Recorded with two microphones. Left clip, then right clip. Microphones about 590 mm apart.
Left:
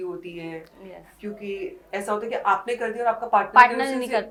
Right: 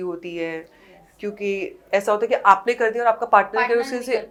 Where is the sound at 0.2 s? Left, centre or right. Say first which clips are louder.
Right 7 dB; right.